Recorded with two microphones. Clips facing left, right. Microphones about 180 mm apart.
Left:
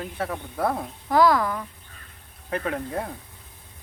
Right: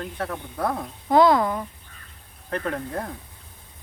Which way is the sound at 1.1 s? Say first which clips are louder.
Right 2 dB; 25° right (ahead or behind).